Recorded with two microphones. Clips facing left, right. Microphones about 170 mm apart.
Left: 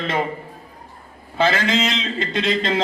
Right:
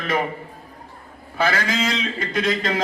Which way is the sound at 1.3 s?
25° left (ahead or behind).